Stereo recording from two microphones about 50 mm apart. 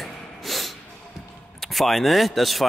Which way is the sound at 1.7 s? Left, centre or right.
Centre.